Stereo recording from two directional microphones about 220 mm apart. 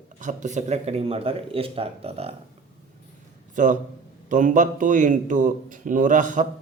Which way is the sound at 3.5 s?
35° right (ahead or behind).